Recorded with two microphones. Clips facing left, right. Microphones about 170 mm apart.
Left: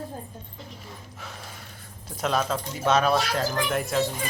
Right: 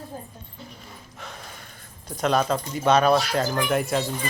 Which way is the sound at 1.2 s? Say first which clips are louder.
Right 2 dB; 5° left (ahead or behind).